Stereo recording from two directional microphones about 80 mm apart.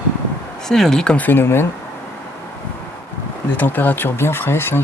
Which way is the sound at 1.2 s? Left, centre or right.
Left.